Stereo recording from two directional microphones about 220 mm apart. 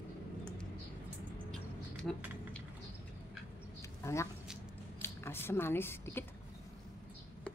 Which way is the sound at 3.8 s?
15° left (ahead or behind).